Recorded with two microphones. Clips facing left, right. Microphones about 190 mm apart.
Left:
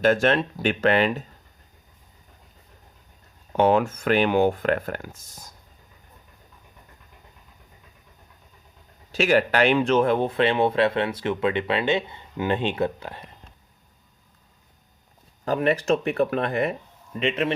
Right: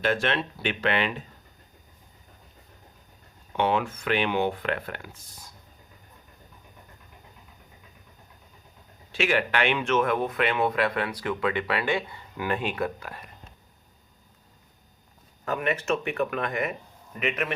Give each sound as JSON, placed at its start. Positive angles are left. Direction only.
{"t": 0.0, "sound": "speech", "side_deg": 45}
{"t": 3.5, "sound": "speech", "side_deg": 40}
{"t": 9.1, "sound": "speech", "side_deg": 40}
{"t": 15.4, "sound": "speech", "side_deg": 30}